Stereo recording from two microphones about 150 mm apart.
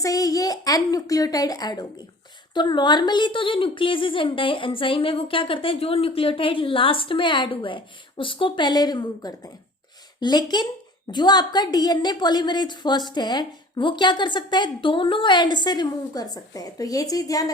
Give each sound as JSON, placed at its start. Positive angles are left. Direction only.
{"t": 0.0, "sound": "a woman's voice", "side_deg": 25}